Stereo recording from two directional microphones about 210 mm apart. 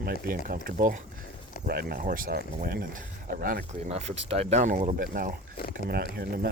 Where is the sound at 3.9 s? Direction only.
30° right (ahead or behind).